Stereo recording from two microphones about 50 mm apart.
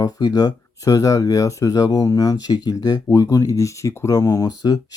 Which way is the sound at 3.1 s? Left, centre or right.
Left.